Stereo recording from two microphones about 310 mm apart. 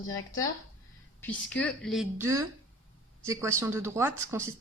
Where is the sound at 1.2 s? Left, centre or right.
Centre.